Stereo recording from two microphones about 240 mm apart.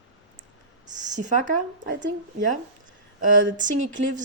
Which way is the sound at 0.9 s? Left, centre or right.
Right.